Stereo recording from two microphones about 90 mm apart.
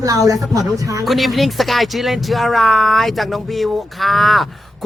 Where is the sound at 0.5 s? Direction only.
40° right (ahead or behind).